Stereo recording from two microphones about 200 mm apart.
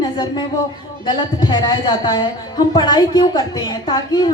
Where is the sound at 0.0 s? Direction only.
20° left (ahead or behind).